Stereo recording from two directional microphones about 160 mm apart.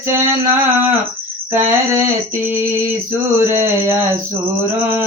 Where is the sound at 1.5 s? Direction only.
15° right (ahead or behind).